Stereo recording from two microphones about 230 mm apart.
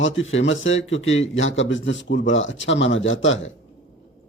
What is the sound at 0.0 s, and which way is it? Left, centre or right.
Speech, left.